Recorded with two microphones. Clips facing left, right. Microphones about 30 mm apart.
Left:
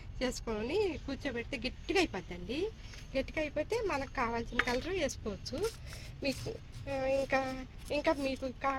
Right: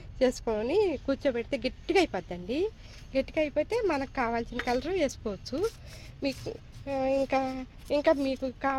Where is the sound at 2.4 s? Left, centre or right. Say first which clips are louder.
Right 6 dB; right.